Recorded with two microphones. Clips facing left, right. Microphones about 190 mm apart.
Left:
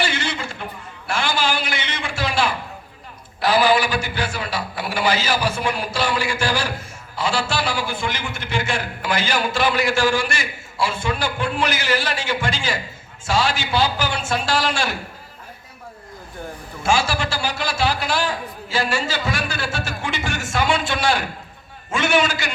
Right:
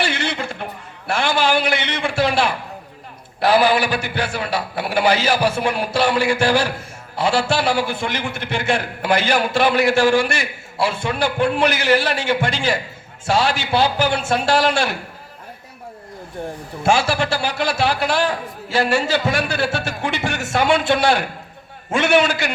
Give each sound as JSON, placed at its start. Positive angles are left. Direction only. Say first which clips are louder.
{"t": 0.0, "sound": "a sound", "louder": "right 2 dB", "side_deg": -60}
{"t": 0.3, "sound": "a man's voice", "louder": "right 3 dB", "side_deg": -60}
{"t": 16.8, "sound": "a man's voice", "louder": "right 3 dB", "side_deg": -60}